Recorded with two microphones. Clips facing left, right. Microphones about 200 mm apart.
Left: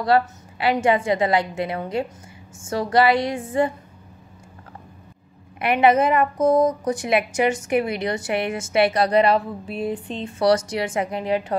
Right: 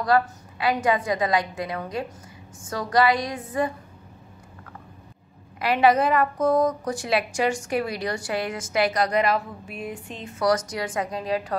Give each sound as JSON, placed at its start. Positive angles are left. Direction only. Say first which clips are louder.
{"t": 0.0, "sound": "a woman's voice", "louder": "left 2 dB", "side_deg": 30}
{"t": 5.6, "sound": "a woman's voice", "louder": "left 2 dB", "side_deg": 20}